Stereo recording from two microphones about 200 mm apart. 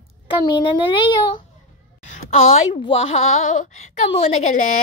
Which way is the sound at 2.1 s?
35° left (ahead or behind).